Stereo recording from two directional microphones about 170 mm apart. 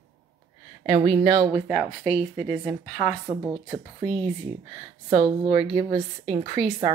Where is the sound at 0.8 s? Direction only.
30° right (ahead or behind).